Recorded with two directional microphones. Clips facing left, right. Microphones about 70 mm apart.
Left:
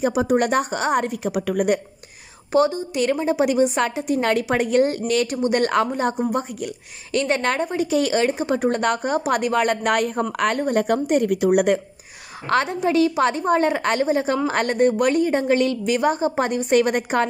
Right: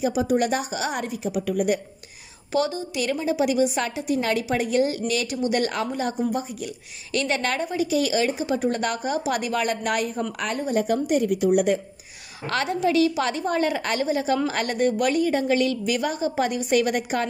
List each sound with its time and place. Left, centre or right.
0.0 s a woman's voice: left
2.5 s a woman's voice: left
7.1 s a woman's voice: left
11.3 s a woman's voice: left
12.4 s a woman's voice: left